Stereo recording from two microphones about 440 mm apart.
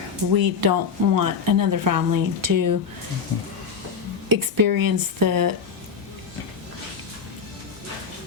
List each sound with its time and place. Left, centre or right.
0.3 s speech: right
4.3 s speech: right